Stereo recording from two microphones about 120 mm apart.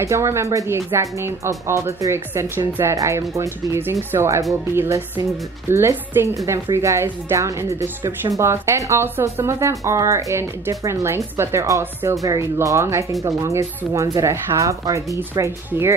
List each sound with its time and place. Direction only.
0.0 s speech: 25° right (ahead or behind)